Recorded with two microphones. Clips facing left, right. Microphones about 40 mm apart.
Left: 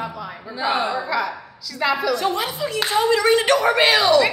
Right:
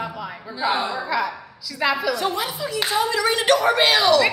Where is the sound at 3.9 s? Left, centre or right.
Centre.